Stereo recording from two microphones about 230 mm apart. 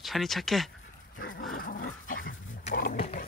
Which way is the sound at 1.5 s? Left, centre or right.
Left.